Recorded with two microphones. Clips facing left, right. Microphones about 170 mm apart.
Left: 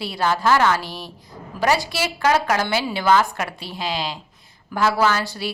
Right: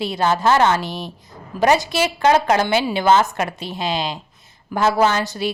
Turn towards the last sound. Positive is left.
turn(degrees=-20)  # may be behind; listen again after turning